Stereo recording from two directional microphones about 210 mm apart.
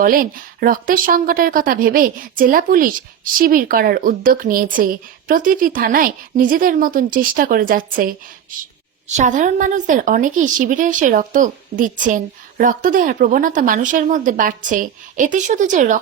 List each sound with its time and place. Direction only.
0.0 s a woman's voice: 40° right (ahead or behind)